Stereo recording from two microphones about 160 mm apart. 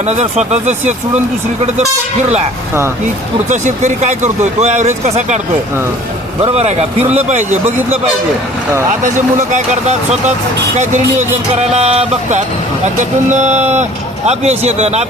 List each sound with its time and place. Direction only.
0.0 s speech: 45° right (ahead or behind)
3.5 s speech: 50° right (ahead or behind)
6.4 s speech: 40° right (ahead or behind)
8.9 s speech: 50° right (ahead or behind)
10.8 s speech: 50° right (ahead or behind)